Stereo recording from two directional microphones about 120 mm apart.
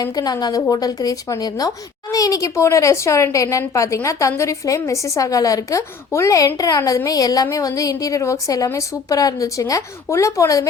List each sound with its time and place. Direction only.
0.0 s a woman's voice: 30° left (ahead or behind)